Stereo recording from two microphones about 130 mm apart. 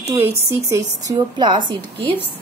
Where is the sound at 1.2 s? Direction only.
35° right (ahead or behind).